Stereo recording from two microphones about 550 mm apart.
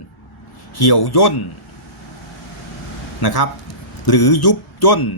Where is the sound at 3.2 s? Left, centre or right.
Left.